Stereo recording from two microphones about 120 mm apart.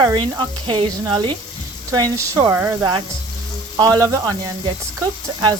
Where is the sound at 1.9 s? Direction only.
30° right (ahead or behind).